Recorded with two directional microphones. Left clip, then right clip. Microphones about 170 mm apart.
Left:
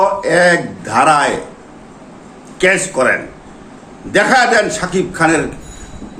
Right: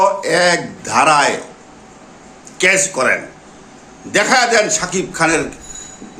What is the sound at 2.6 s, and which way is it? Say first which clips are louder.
A man's voice: left 1 dB; 15° right (ahead or behind).